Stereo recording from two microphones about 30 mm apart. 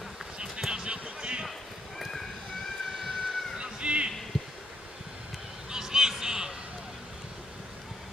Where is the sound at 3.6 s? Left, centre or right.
Right.